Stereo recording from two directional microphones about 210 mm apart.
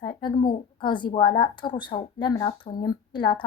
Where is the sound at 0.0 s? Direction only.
20° left (ahead or behind).